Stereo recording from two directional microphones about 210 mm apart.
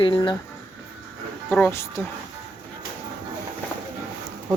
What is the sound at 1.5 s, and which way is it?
Speech, 10° left (ahead or behind).